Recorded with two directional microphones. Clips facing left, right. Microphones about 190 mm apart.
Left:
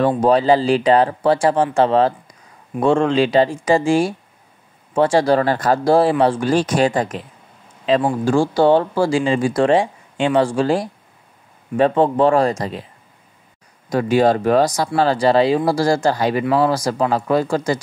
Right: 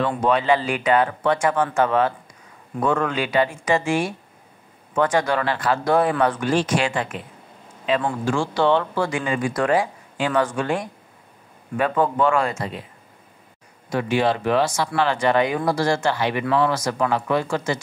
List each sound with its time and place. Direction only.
0.2 s speech: 35° left (ahead or behind)
13.8 s speech: 40° left (ahead or behind)